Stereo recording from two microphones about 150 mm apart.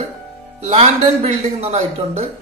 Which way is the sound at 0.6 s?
45° right (ahead or behind).